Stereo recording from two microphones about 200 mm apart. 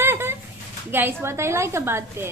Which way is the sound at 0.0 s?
10° right (ahead or behind).